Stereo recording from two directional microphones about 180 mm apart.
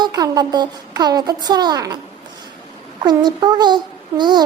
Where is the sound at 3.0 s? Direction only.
25° right (ahead or behind).